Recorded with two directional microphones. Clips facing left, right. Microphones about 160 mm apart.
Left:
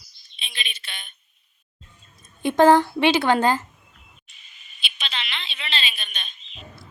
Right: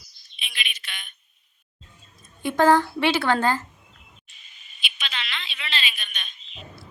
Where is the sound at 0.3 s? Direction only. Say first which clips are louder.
Even; 30° left (ahead or behind).